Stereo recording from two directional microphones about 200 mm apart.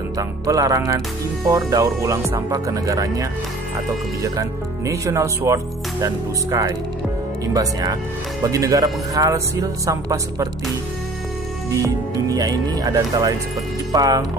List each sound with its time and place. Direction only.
0.5 s speech: 15° right (ahead or behind)
12.3 s speech: 20° right (ahead or behind)